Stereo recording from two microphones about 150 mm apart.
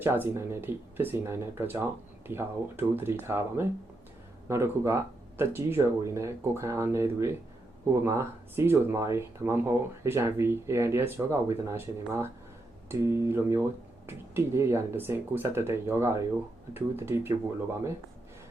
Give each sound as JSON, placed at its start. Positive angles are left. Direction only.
{"t": 0.0, "sound": "speech", "side_deg": -15}